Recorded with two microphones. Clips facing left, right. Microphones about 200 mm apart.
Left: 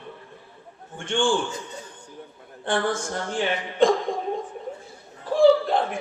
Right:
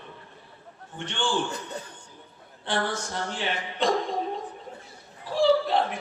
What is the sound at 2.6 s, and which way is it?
Speech, 50° left (ahead or behind).